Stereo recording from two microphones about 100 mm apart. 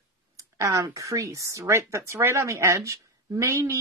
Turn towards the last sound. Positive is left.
turn(degrees=-30)  # may be behind; listen again after turning